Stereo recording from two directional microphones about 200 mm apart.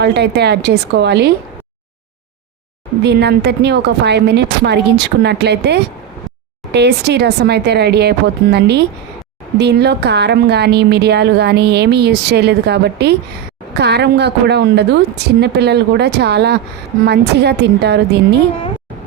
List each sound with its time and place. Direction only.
0.0 s a woman's voice: 55° right (ahead or behind)
3.0 s a woman's voice: 55° right (ahead or behind)